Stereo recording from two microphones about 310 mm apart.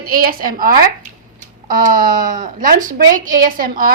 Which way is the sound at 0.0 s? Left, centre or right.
Right.